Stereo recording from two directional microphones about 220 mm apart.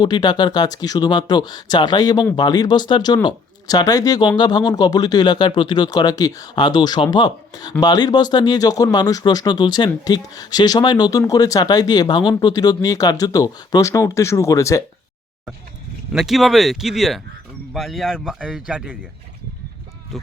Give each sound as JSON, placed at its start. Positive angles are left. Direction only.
{"t": 0.0, "sound": "speech", "side_deg": 20}
{"t": 16.1, "sound": "speech", "side_deg": 0}